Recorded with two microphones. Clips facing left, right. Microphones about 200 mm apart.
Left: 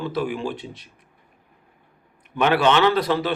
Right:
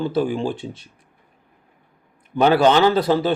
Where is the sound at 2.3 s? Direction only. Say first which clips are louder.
Right 4 dB; 35° right (ahead or behind).